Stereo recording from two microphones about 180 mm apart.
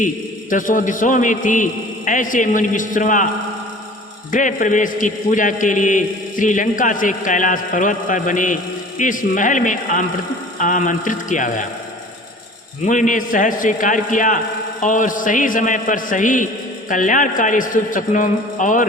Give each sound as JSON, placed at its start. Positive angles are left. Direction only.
{"t": 0.5, "sound": "a man's voice", "side_deg": 50}
{"t": 4.3, "sound": "a man's voice", "side_deg": 45}
{"t": 12.8, "sound": "a man's voice", "side_deg": 45}